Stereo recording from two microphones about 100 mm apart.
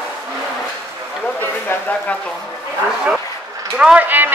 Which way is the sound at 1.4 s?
20° left (ahead or behind).